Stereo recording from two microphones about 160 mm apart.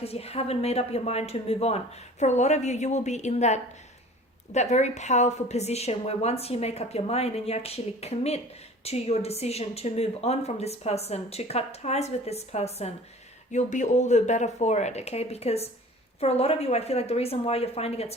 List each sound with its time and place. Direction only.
0.0 s speech: 40° left (ahead or behind)